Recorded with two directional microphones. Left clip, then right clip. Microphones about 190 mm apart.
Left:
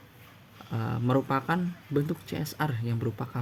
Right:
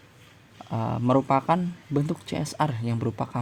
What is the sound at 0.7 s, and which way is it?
Speech, 35° right (ahead or behind).